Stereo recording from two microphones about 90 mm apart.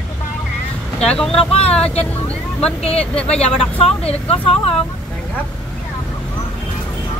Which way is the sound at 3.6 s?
90° left.